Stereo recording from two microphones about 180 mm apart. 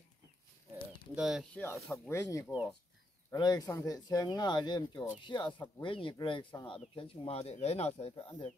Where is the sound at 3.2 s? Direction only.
20° left (ahead or behind).